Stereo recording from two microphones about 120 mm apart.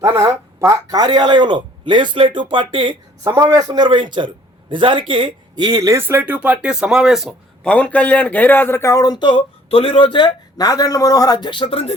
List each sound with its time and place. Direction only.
0.0 s speech: 25° right (ahead or behind); by 3.3 s 40° right (ahead or behind)
3.3 s speech: 30° right (ahead or behind); by 7.7 s centre (ahead or behind)
7.7 s speech: 10° left (ahead or behind); by 11.9 s 55° left (ahead or behind)